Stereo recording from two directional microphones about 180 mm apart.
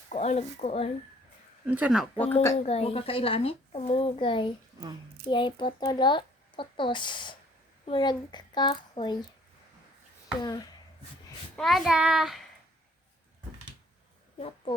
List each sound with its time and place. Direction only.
0.1 s speech: 40° left (ahead or behind)
1.6 s speech: 10° right (ahead or behind)
2.1 s speech: 10° left (ahead or behind)
2.6 s speech: 35° left (ahead or behind)
11.5 s a child's voice: centre (ahead or behind)